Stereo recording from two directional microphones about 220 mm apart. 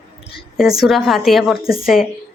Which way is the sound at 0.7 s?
Centre (ahead or behind).